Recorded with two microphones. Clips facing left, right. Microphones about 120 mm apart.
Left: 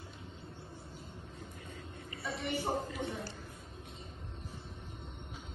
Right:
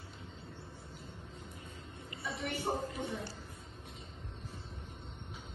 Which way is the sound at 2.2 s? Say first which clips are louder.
Left 1 dB; centre (ahead or behind).